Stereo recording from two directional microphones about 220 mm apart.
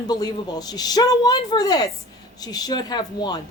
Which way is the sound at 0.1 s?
20° left (ahead or behind).